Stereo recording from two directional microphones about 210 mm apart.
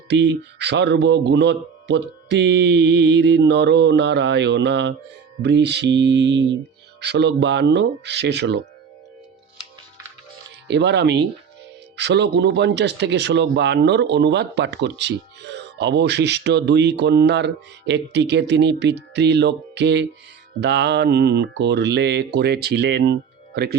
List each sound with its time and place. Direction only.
0.1 s a man's voice: 55° right (ahead or behind)
10.7 s a man's voice: 55° right (ahead or behind)